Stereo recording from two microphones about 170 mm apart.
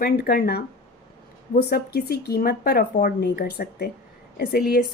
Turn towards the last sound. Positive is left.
turn(degrees=70)  # may be behind; listen again after turning